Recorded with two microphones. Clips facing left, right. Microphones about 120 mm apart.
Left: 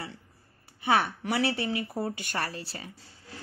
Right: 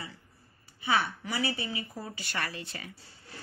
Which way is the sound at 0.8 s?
60° left (ahead or behind).